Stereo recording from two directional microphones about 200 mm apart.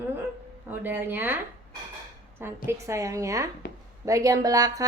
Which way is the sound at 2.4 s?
10° right (ahead or behind).